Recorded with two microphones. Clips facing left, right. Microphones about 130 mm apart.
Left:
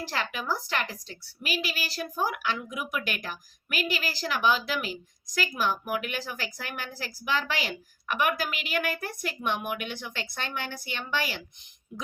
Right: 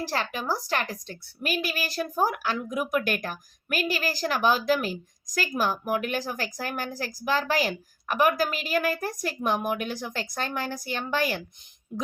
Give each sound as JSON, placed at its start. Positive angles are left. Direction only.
{"t": 0.0, "sound": "a woman's voice", "side_deg": -35}